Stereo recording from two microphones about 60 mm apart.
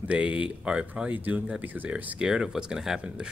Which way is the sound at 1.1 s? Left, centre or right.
Right.